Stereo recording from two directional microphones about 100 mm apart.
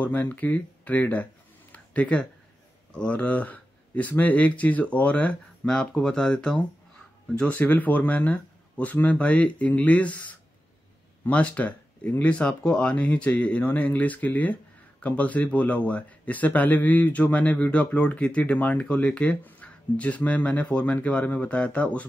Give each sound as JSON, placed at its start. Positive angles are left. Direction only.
{"t": 0.0, "sound": "speech", "side_deg": 15}
{"t": 1.7, "sound": "a sound", "side_deg": 10}
{"t": 2.9, "sound": "speech", "side_deg": 10}